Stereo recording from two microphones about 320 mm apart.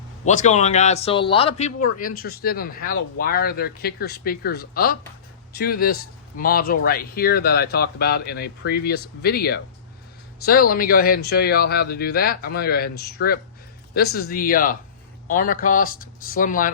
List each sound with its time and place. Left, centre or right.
0.3 s speech: left